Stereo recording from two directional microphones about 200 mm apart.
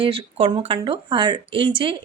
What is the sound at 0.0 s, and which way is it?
A woman's voice, 25° right (ahead or behind).